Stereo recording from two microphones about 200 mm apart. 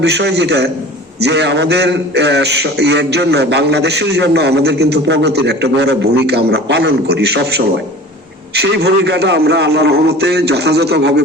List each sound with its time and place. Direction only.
0.0 s a man's voice: 55° right (ahead or behind)